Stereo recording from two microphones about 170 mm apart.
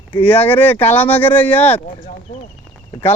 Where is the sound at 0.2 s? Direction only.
10° left (ahead or behind).